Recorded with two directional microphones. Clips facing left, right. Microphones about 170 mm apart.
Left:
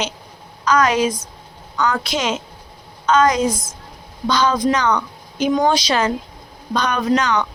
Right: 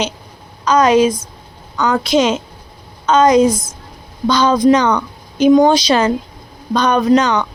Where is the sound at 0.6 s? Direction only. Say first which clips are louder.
Right 5 dB; 25° right (ahead or behind).